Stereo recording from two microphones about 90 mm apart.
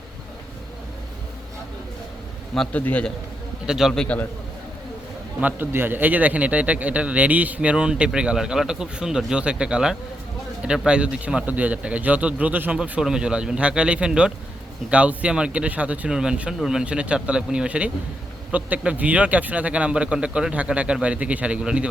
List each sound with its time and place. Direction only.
2.7 s a man's voice: 15° left (ahead or behind)
3.7 s a man's voice: 5° right (ahead or behind)
3.9 s a man's voice: 10° left (ahead or behind)
5.4 s speech: 20° right (ahead or behind)